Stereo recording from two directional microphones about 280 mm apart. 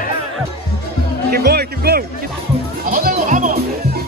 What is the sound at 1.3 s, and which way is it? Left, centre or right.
Music, right.